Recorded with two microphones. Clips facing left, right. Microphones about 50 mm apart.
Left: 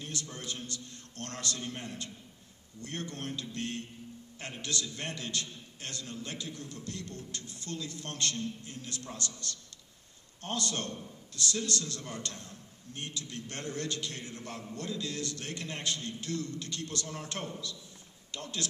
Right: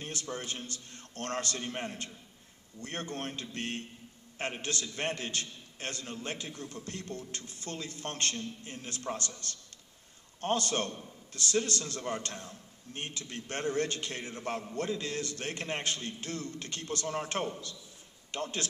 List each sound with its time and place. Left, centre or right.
0.0 s a man's voice: right